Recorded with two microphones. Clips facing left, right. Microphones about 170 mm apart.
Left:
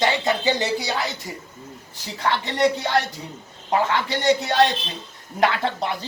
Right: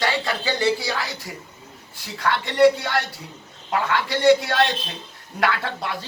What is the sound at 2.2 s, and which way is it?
Speech, 20° left (ahead or behind).